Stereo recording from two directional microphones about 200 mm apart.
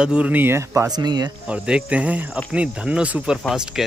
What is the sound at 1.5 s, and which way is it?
Speech, 5° right (ahead or behind).